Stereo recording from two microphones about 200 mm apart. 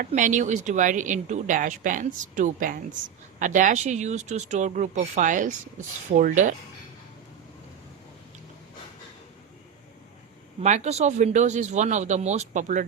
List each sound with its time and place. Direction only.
0.0 s speech: 40° right (ahead or behind)
10.6 s speech: 35° right (ahead or behind)